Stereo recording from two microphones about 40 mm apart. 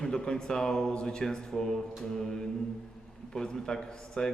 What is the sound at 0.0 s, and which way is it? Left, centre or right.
Speech, centre.